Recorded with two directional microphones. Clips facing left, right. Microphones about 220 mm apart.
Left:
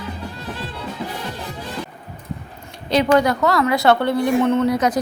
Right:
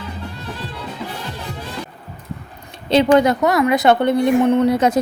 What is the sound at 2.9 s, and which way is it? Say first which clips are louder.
A woman's voice: right 3 dB; 25° right (ahead or behind).